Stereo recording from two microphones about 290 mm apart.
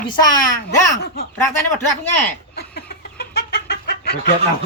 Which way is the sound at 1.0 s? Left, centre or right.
Left.